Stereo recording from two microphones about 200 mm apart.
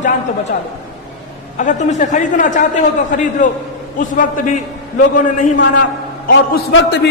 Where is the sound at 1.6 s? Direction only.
35° left (ahead or behind).